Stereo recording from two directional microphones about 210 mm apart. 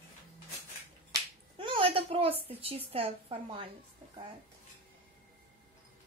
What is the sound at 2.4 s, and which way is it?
A woman's voice, 30° right (ahead or behind).